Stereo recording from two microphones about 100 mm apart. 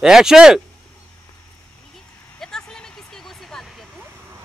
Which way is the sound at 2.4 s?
5° left (ahead or behind).